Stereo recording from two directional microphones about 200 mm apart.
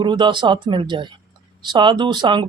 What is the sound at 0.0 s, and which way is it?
Speech, 25° right (ahead or behind).